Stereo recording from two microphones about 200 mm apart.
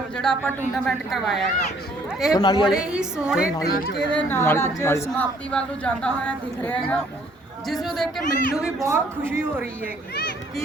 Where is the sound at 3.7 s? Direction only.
50° left (ahead or behind).